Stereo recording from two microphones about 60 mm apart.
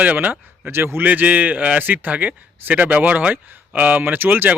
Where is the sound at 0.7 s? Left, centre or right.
Right.